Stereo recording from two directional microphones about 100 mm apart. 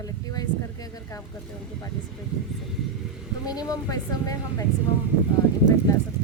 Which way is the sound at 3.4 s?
40° left (ahead or behind).